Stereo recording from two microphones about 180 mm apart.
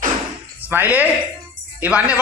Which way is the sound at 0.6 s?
10° right (ahead or behind).